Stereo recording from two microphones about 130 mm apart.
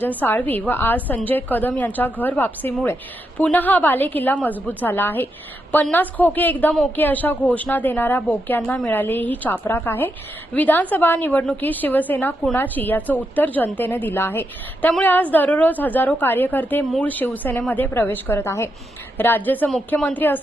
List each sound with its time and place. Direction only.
0.2 s a woman's voice: 15° left (ahead or behind)